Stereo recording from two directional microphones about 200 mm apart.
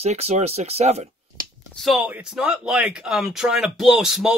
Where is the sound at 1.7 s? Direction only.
Centre (ahead or behind).